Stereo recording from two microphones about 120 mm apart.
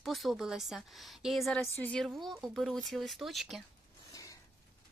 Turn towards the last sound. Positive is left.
turn(degrees=30)  # may be behind; listen again after turning